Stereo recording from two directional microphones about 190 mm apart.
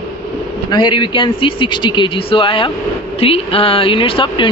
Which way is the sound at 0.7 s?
25° left (ahead or behind).